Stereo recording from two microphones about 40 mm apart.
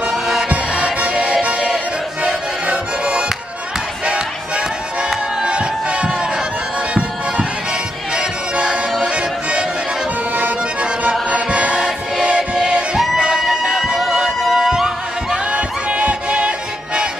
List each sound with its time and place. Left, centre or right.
0.1 s music: centre
0.9 s music: right
2.6 s music: right
6.9 s bagpipes: right
8.1 s music: centre
10.3 s accordion: right
11.2 s music: right
11.7 s choir: centre
13.4 s a sound: centre
14.4 s music: centre
15.5 s music: right